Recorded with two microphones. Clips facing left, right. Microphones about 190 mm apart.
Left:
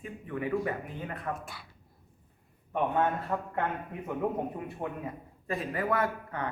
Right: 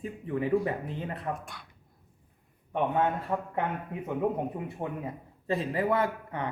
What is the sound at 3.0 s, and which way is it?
A man's voice, 15° right (ahead or behind).